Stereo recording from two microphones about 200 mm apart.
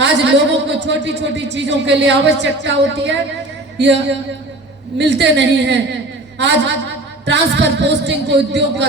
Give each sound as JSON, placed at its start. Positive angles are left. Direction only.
{"t": 0.0, "sound": "a man's voice", "side_deg": -60}
{"t": 7.3, "sound": "a man's voice", "side_deg": -60}